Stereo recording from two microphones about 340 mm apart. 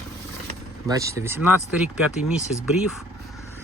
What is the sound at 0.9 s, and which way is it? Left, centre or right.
Speech, centre.